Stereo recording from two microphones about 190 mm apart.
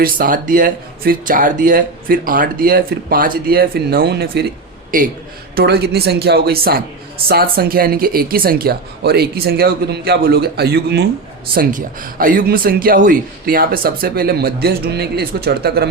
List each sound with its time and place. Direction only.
0.0 s speech: 50° right (ahead or behind)
5.5 s speech: 55° right (ahead or behind)
11.5 s speech: 45° right (ahead or behind)